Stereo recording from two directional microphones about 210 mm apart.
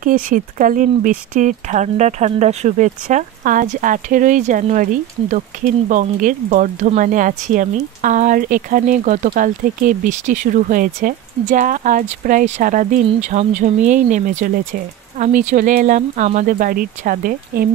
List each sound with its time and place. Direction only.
0.0 s speech: 40° right (ahead or behind)